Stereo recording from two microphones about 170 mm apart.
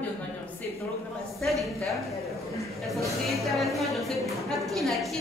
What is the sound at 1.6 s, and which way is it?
Speech, centre (ahead or behind).